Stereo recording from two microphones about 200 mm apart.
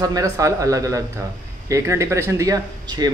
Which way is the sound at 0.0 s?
15° right (ahead or behind).